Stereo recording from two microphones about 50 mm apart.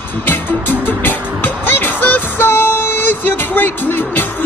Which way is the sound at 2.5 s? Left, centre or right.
Left.